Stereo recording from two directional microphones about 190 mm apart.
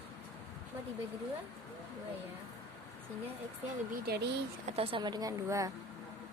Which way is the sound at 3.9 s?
55° right (ahead or behind).